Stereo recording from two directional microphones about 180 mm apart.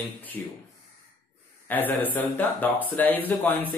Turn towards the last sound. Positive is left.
turn(degrees=10)  # may be behind; listen again after turning